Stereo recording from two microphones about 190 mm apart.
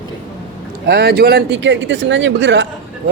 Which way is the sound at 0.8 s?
60° right (ahead or behind).